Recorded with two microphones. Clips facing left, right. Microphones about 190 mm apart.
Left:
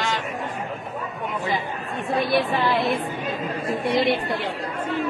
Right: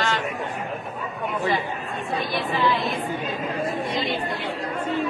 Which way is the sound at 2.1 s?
65° left (ahead or behind).